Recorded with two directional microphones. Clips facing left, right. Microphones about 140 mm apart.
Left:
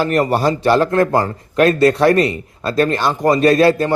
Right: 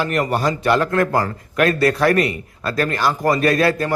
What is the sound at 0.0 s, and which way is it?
A man's voice, 35° left (ahead or behind).